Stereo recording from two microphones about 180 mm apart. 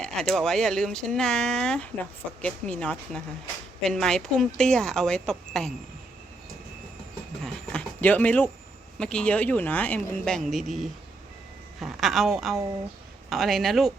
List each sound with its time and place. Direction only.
0.0 s a woman's voice: centre (ahead or behind)
7.4 s a sound: 5° left (ahead or behind)
9.0 s a woman's voice: 5° left (ahead or behind)